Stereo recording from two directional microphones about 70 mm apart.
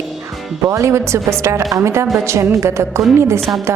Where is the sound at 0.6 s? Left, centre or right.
Right.